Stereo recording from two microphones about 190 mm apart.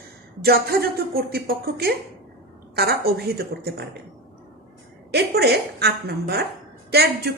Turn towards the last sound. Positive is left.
turn(degrees=-60)  # may be behind; listen again after turning